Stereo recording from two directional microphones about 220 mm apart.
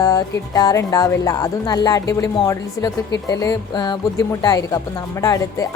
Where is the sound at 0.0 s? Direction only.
15° left (ahead or behind).